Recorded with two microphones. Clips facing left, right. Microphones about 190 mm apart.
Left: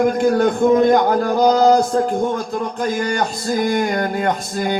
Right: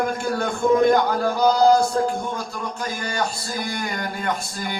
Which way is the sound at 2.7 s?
50° left (ahead or behind).